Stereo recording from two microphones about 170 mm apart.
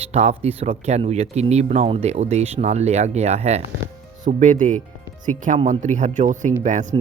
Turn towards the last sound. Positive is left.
turn(degrees=-45)  # may be behind; listen again after turning